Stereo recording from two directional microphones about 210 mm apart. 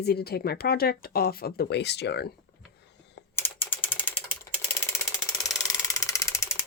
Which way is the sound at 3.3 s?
10° left (ahead or behind).